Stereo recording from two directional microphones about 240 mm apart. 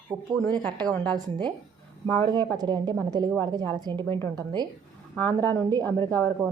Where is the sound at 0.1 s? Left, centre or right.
Centre.